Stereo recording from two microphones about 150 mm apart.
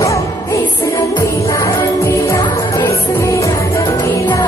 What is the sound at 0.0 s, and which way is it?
Music, 20° left (ahead or behind).